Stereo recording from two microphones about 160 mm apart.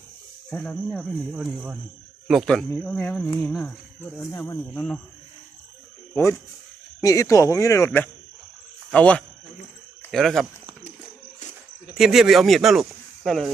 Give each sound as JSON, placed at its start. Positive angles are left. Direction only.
{"t": 0.5, "sound": "speech", "side_deg": 5}
{"t": 1.5, "sound": "a man's voice", "side_deg": -10}
{"t": 2.2, "sound": "speech", "side_deg": 0}
{"t": 6.1, "sound": "speech", "side_deg": 15}
{"t": 11.9, "sound": "speech", "side_deg": 0}